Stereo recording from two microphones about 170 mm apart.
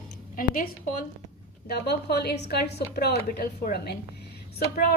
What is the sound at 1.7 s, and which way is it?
A woman's voice, 75° left (ahead or behind).